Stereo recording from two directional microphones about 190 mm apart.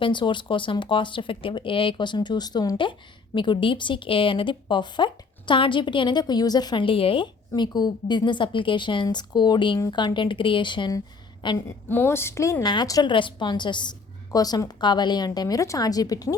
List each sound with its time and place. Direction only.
0.0 s a woman's voice: 25° left (ahead or behind)